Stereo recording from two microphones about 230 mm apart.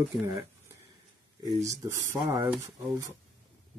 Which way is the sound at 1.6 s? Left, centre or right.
Centre.